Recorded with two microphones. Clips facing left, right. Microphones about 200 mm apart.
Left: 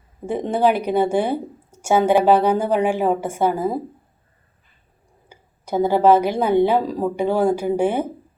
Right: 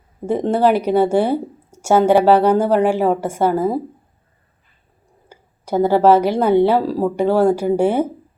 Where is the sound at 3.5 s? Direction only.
10° right (ahead or behind).